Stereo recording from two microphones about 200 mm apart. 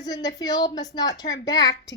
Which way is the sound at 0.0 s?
20° left (ahead or behind).